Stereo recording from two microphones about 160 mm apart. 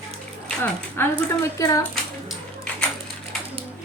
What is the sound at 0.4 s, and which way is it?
Speech, 10° left (ahead or behind).